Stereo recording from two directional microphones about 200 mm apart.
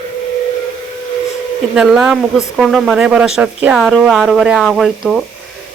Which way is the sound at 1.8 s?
5° right (ahead or behind).